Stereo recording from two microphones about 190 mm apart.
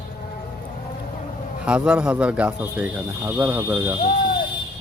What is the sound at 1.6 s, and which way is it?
Speech, 5° right (ahead or behind).